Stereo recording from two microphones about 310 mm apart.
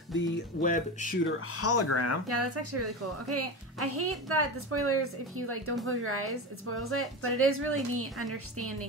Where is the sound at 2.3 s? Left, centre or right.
Right.